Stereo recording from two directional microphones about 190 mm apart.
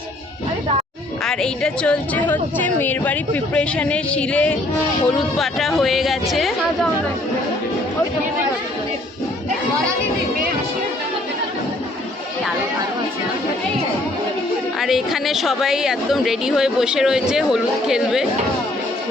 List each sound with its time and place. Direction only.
1.2 s a woman's voice: 5° left (ahead or behind)
14.8 s a woman's voice: centre (ahead or behind)